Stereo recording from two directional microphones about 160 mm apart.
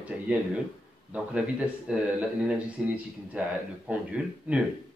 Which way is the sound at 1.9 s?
5° right (ahead or behind).